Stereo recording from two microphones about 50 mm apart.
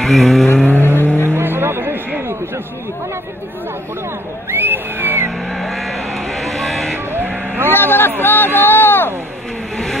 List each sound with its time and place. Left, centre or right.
0.0 s vehicle: centre
0.7 s vehicle: left
1.2 s vehicle: right
4.6 s speech: right
5.5 s vehicle: centre
7.6 s speech: left
8.2 s a sound: left